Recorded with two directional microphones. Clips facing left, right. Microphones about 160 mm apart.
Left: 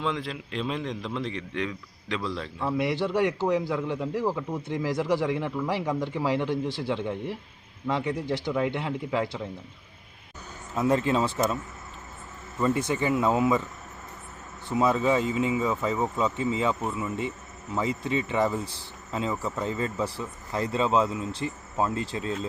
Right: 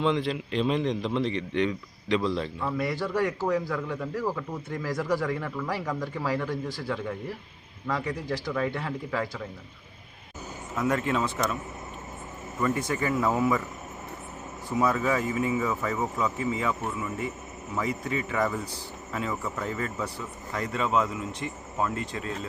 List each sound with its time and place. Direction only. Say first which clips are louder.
0.0 s speech: right 5 dB; centre (ahead or behind)
2.6 s a man's voice: left 5 dB; 20° left (ahead or behind)
10.8 s a man's voice: left 3 dB; 30° left (ahead or behind)
12.5 s a man's voice: left 2 dB; 25° left (ahead or behind)
14.8 s a man's voice: left 2 dB; 25° left (ahead or behind)